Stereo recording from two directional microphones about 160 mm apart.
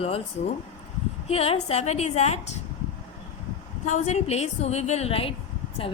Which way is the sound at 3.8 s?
50° left (ahead or behind).